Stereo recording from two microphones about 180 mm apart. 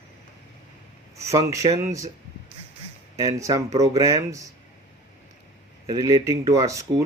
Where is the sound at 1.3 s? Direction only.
20° right (ahead or behind).